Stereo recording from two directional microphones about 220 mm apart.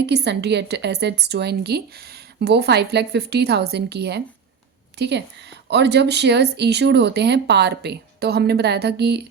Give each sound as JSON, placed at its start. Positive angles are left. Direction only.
{"t": 0.0, "sound": "speech", "side_deg": -50}